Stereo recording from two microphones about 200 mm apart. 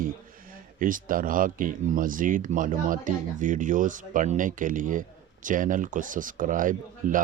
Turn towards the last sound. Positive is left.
turn(degrees=-40)  # may be behind; listen again after turning